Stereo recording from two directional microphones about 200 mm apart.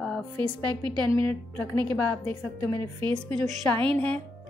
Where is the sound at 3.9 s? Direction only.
5° left (ahead or behind).